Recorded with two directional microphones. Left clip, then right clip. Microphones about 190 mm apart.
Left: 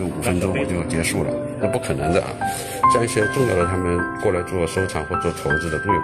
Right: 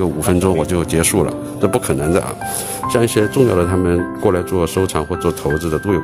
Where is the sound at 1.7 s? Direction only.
30° right (ahead or behind).